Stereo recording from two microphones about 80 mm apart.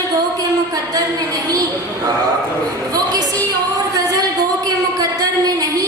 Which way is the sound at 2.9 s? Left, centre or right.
Right.